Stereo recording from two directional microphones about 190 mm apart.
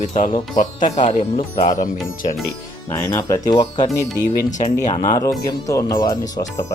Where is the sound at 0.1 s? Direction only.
40° left (ahead or behind).